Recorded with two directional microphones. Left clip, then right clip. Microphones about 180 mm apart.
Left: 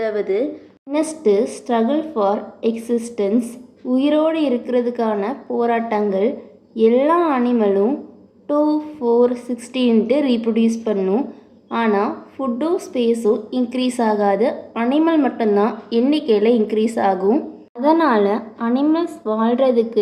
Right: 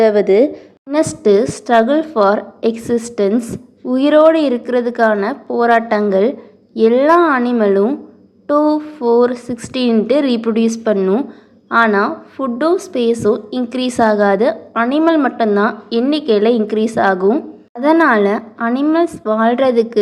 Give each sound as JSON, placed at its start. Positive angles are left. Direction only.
{"t": 0.0, "sound": "a woman's voice", "side_deg": -45}